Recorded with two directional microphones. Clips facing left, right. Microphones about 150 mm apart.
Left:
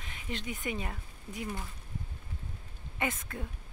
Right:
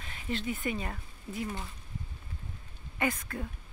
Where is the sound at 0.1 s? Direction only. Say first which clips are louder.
Right 5 dB; 15° left (ahead or behind).